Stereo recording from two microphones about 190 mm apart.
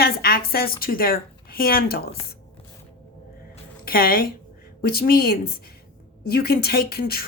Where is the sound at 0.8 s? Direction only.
50° left (ahead or behind).